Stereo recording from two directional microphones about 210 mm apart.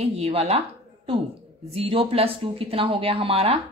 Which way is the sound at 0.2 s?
30° right (ahead or behind).